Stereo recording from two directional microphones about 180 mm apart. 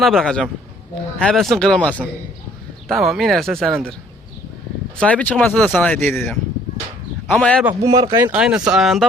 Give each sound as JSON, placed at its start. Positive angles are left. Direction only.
{"t": 0.0, "sound": "speech", "side_deg": 0}
{"t": 4.9, "sound": "speech", "side_deg": 5}
{"t": 7.7, "sound": "speech", "side_deg": -25}
{"t": 8.3, "sound": "speech", "side_deg": -5}